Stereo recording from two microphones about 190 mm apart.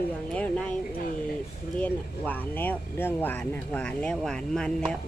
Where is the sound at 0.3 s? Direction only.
5° left (ahead or behind).